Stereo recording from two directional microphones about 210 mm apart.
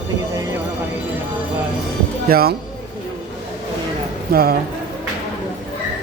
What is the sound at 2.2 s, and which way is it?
Speech, 45° right (ahead or behind).